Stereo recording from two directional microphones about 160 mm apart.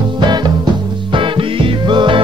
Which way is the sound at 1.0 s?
30° right (ahead or behind).